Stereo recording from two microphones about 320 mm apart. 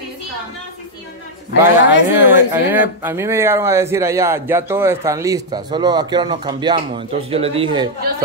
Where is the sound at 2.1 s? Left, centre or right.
Centre.